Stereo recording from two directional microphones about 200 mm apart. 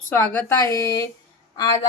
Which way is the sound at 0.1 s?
10° left (ahead or behind).